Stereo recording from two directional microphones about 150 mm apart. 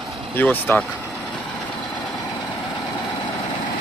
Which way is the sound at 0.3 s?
10° left (ahead or behind).